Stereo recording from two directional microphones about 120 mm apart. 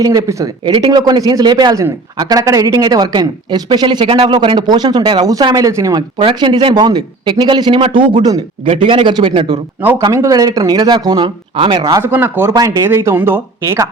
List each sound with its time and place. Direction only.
0.0 s speech: 30° right (ahead or behind)
0.6 s a man's voice: 40° right (ahead or behind)
6.4 s a man's voice: 40° right (ahead or behind)
10.0 s a man's voice: 25° right (ahead or behind)
12.0 s speech: 15° right (ahead or behind)